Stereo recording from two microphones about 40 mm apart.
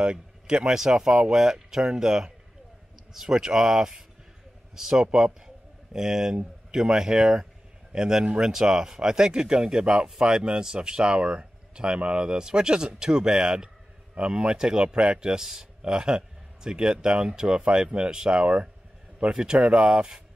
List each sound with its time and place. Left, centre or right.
0.0 s speech: right